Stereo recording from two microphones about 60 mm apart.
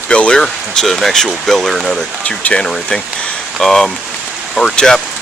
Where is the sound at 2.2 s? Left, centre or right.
Left.